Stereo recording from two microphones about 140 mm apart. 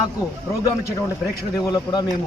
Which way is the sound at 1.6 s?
30° left (ahead or behind).